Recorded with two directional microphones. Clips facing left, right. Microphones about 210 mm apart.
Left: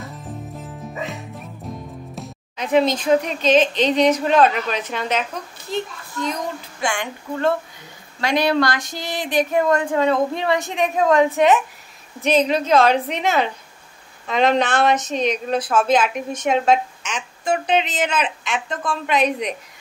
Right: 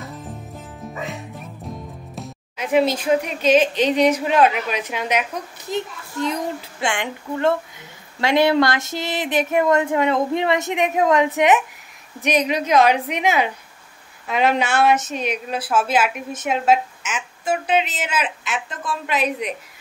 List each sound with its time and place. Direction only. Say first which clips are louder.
0.0 s music: left 1 dB; centre (ahead or behind)
2.1 s speech: right 1 dB; 5° right (ahead or behind)
6.8 s a sound: even; 25° right (ahead or behind)
12.2 s speech: left 2 dB; 15° right (ahead or behind)